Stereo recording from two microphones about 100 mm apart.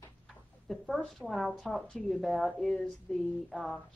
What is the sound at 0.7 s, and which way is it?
A woman's voice, centre (ahead or behind).